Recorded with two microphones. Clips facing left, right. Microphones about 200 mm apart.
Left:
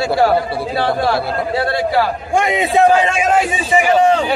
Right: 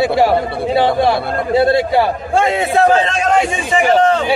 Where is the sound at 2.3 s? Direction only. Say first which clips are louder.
Even; 15° left (ahead or behind).